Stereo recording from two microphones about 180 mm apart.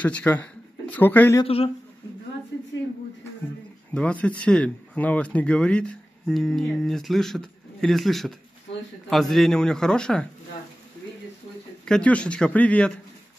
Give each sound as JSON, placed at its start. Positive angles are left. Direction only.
{"t": 0.0, "sound": "speech", "side_deg": 10}
{"t": 1.4, "sound": "speech", "side_deg": 30}
{"t": 3.9, "sound": "speech", "side_deg": 5}
{"t": 11.8, "sound": "speech", "side_deg": 5}